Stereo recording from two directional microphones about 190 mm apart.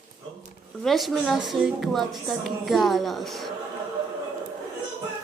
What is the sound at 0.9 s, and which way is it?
A woman's voice, centre (ahead or behind).